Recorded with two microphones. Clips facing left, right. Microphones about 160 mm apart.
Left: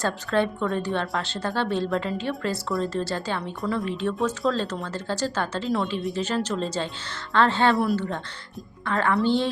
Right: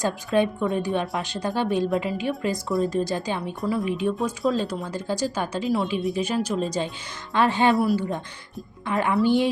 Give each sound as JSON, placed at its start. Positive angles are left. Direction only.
{"t": 0.0, "sound": "a woman's voice", "side_deg": -15}
{"t": 3.6, "sound": "speech", "side_deg": 0}
{"t": 3.8, "sound": "a woman's voice", "side_deg": -15}